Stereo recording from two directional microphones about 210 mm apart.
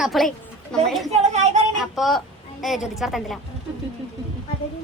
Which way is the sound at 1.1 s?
35° right (ahead or behind).